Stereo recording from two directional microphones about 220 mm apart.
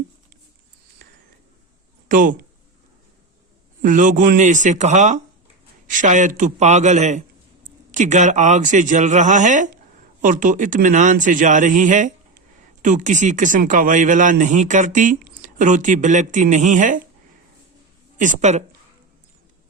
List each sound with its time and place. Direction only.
1.0 s a sound: 40° right (ahead or behind)
2.0 s speech: 40° right (ahead or behind)
3.8 s speech: 35° right (ahead or behind)
18.2 s speech: 35° right (ahead or behind)